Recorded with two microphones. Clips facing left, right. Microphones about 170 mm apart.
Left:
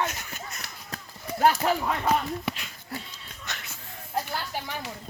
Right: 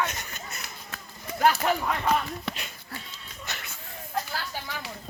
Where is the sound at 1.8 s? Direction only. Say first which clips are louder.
Left 1 dB; 15° left (ahead or behind).